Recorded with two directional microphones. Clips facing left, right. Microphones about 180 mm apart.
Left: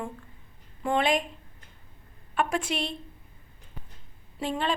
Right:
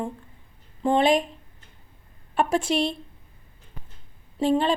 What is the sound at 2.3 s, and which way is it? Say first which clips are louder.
Speech: right 5 dB; 35° right (ahead or behind).